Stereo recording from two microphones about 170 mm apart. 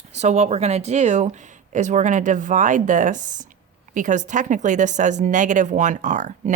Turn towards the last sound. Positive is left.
turn(degrees=-45)  # may be behind; listen again after turning